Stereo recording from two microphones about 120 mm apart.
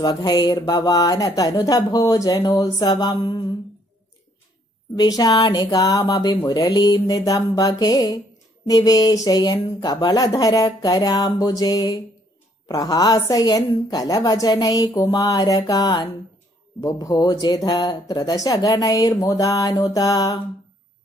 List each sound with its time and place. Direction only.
0.0 s speech: 35° left (ahead or behind)
4.9 s speech: 35° left (ahead or behind)